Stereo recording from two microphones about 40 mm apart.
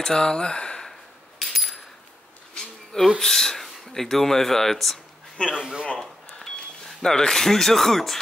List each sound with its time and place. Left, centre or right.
0.0 s speech: centre
1.4 s coin: centre
2.5 s a sound: centre
3.2 s speech: centre
5.5 s speech: centre
5.9 s speech: centre